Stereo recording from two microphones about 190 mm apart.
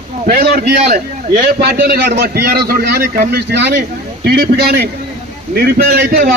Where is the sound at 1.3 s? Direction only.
55° right (ahead or behind).